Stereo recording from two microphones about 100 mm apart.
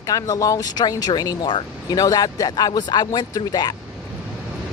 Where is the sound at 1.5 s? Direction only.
55° left (ahead or behind).